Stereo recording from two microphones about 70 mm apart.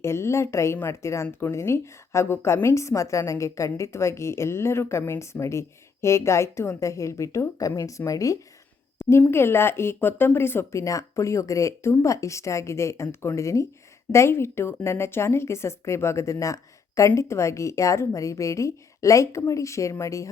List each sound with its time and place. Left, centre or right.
0.0 s speech: left
9.0 s a sound: left
9.3 s speech: left